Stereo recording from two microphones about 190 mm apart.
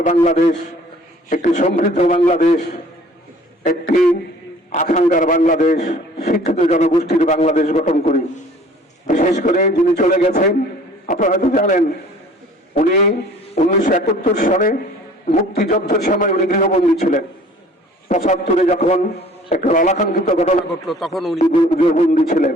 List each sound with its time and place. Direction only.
0.0 s a man's voice: 40° left (ahead or behind)
20.8 s speech: centre (ahead or behind)
21.4 s a man's voice: 30° left (ahead or behind)